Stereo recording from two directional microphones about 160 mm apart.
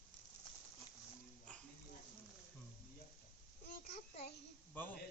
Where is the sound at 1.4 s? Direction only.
5° left (ahead or behind).